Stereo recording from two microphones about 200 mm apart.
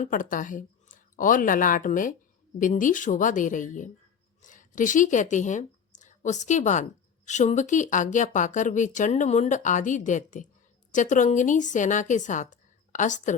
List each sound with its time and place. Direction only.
0.0 s speech: 40° left (ahead or behind)